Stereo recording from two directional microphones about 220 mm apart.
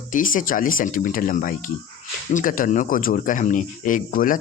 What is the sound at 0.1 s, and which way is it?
Speech, 35° left (ahead or behind).